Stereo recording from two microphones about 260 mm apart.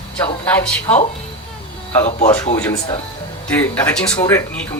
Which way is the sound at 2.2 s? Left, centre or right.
Centre.